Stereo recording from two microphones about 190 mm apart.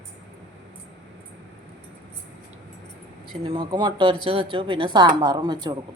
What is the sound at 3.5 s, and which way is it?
Speech, 25° right (ahead or behind).